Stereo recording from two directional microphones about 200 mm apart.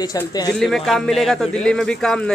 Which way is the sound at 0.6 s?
Centre (ahead or behind).